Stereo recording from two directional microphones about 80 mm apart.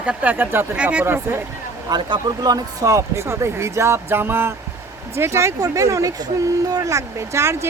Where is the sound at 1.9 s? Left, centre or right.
Right.